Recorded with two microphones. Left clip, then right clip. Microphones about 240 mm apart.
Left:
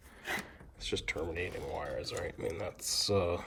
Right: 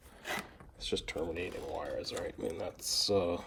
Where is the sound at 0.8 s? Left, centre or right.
Centre.